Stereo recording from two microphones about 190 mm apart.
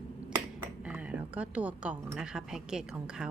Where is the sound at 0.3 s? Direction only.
10° right (ahead or behind).